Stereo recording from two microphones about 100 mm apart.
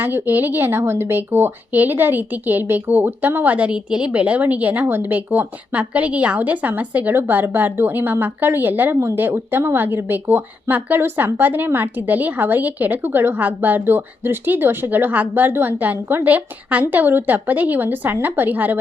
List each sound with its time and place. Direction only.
0.0 s speech: 20° right (ahead or behind)